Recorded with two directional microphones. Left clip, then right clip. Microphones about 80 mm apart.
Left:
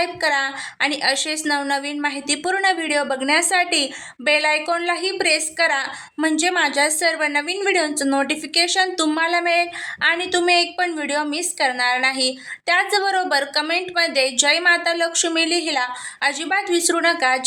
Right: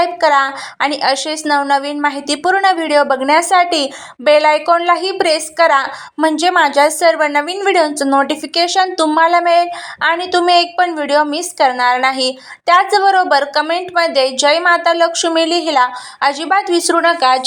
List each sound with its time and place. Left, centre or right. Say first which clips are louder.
0.0 s a woman's voice: right 8 dB; right
6.3 s a woman's voice: right 7 dB; centre
10.4 s a woman's voice: right 7 dB; right
15.4 s a woman's voice: right 9 dB; right
17.2 s a woman's voice: right 7 dB; right